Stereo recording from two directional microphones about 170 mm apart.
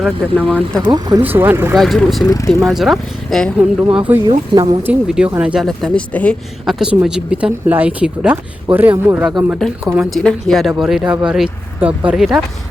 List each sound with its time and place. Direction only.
0.0 s speech: 5° left (ahead or behind)
0.9 s speech: 25° right (ahead or behind)
1.2 s speech: 10° right (ahead or behind)
1.7 s speech: centre (ahead or behind)
2.2 s speech: 20° left (ahead or behind)
2.6 s speech: centre (ahead or behind)
3.8 s speech: 10° right (ahead or behind)
4.3 s speech: 25° right (ahead or behind)
4.8 s speech: 5° right (ahead or behind)
10.0 s speech: 5° left (ahead or behind)